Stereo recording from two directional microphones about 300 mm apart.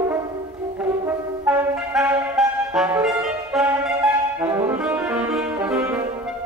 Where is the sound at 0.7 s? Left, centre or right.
Centre.